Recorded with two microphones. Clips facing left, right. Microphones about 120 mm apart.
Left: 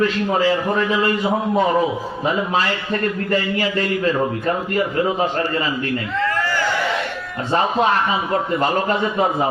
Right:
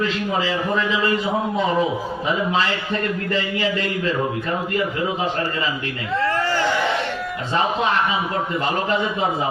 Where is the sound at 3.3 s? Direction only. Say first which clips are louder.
Left 2 dB; 45° left (ahead or behind).